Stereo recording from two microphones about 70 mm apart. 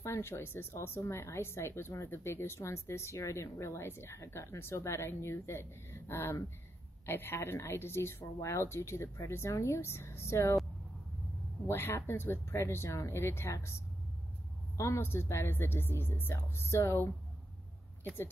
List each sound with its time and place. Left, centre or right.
0.0 s speech: left
11.6 s speech: left
14.8 s speech: left
18.0 s speech: left